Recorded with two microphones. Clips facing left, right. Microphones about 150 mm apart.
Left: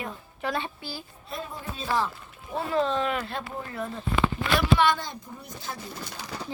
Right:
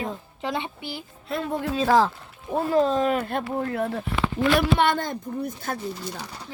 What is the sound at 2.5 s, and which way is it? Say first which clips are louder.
Speech: right 5 dB; 40° right (ahead or behind).